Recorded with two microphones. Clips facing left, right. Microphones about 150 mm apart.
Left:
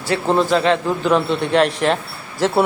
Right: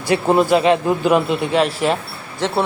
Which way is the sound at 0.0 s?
15° right (ahead or behind).